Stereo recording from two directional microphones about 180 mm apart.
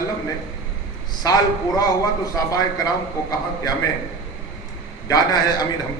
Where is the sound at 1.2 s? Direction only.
20° left (ahead or behind).